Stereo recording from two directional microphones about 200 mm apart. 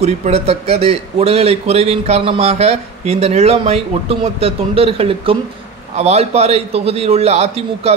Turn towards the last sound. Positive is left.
turn(degrees=-30)  # may be behind; listen again after turning